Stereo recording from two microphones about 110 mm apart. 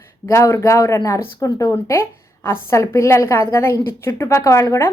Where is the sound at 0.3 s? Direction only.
25° left (ahead or behind).